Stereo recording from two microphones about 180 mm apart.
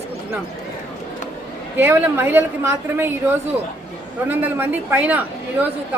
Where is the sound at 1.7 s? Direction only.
10° right (ahead or behind).